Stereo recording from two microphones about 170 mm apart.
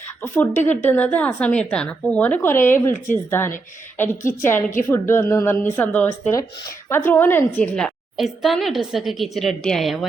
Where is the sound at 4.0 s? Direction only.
15° left (ahead or behind).